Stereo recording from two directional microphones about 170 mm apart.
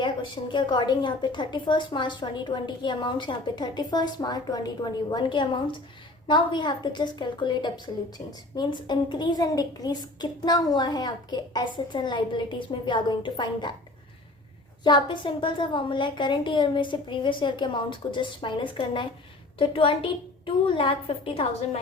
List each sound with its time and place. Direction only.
0.0 s a woman's voice: 30° left (ahead or behind)
14.8 s a woman's voice: 25° left (ahead or behind)